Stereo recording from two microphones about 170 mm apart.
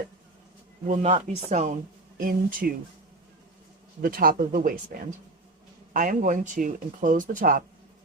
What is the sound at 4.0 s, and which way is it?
Speech, 60° right (ahead or behind).